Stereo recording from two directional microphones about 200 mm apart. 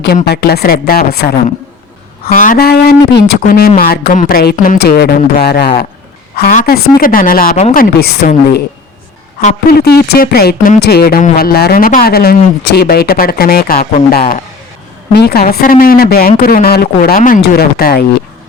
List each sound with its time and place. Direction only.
0.3 s speech: 50° left (ahead or behind)
9.6 s speech: 55° left (ahead or behind)